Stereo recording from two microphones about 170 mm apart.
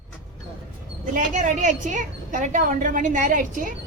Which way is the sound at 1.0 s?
50° right (ahead or behind).